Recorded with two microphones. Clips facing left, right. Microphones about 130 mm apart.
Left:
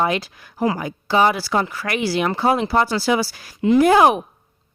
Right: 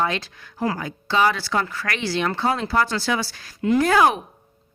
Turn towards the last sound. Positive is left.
turn(degrees=20)  # may be behind; listen again after turning